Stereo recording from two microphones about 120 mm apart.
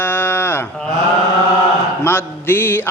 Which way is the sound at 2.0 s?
20° left (ahead or behind).